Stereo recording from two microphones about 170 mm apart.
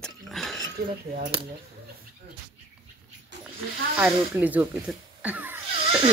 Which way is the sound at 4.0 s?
10° right (ahead or behind).